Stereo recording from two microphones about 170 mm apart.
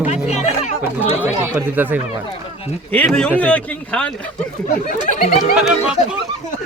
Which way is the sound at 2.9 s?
5° left (ahead or behind).